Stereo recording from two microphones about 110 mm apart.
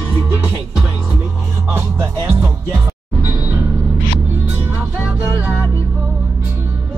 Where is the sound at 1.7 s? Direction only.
20° right (ahead or behind).